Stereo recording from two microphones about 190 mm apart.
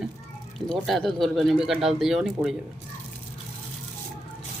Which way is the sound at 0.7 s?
Centre (ahead or behind).